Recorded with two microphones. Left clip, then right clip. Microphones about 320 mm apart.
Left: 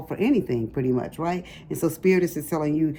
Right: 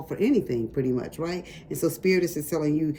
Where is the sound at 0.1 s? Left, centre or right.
Centre.